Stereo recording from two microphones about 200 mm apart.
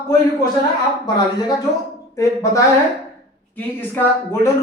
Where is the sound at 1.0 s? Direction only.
20° left (ahead or behind).